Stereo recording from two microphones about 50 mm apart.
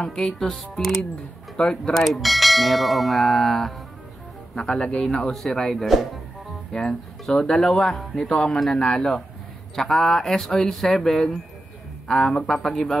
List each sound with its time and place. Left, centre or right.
0.0 s speech: centre
2.0 s speech: centre
4.6 s speech: centre